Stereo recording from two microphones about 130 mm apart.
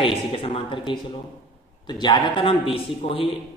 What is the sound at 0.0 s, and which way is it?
A man's voice, 45° left (ahead or behind).